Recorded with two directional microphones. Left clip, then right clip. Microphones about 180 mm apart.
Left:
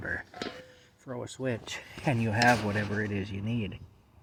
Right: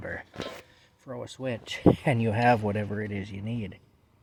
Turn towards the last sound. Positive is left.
turn(degrees=-20)  # may be behind; listen again after turning